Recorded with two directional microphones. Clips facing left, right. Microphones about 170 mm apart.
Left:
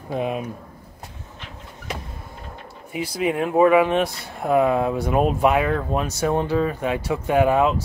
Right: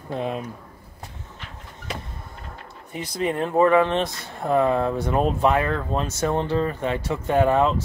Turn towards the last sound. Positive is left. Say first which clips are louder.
# left 1 dB
turn(degrees=10)  # may be behind; listen again after turning